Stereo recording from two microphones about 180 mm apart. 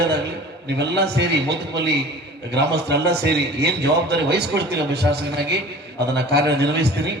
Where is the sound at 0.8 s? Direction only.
65° right (ahead or behind).